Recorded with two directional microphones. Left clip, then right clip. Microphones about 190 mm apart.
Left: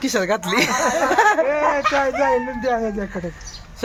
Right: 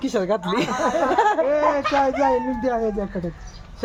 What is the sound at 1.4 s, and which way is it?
Speech, 60° right (ahead or behind).